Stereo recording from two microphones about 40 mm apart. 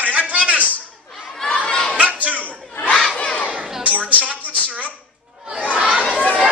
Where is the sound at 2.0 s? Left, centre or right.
Right.